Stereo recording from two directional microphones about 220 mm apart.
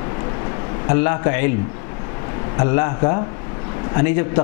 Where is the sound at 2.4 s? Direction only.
15° left (ahead or behind).